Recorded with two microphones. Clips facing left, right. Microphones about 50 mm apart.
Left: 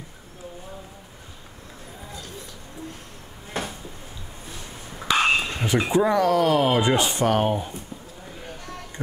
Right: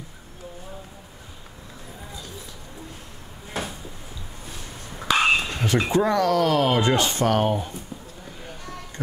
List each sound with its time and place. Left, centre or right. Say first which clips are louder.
4.5 s frog: even; centre
5.5 s speech: even; centre